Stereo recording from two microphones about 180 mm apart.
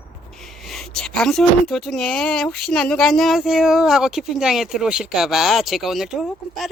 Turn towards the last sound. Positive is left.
turn(degrees=0)  # may be behind; listen again after turning